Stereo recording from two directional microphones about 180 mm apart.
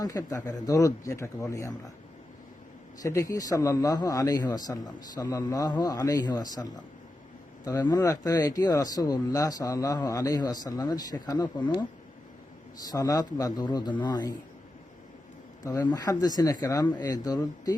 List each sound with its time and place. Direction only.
0.0 s speech: 20° left (ahead or behind)
3.0 s speech: 20° left (ahead or behind)
15.6 s speech: 20° left (ahead or behind)